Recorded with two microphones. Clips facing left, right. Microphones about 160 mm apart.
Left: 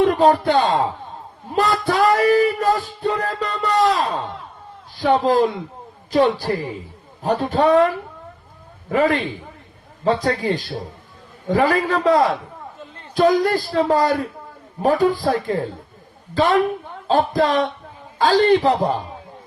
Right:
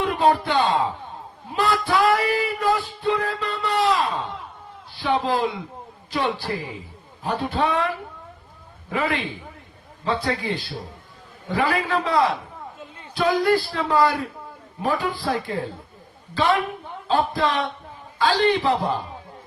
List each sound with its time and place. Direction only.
0.0 s speech: 40° left (ahead or behind)
1.5 s music: 45° left (ahead or behind)